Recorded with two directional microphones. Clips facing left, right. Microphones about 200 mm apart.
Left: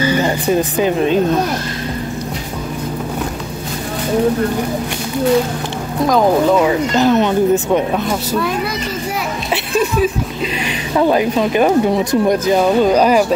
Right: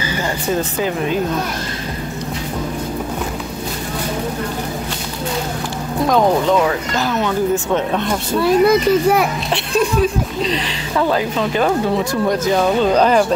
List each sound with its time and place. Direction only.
0.2 s speech: 20° left (ahead or behind)
7.0 s speech: 20° left (ahead or behind)
7.9 s speech: 5° left (ahead or behind)
8.6 s a child's voice: 55° right (ahead or behind)
9.5 s speech: 5° left (ahead or behind)
11.0 s speech: 15° left (ahead or behind)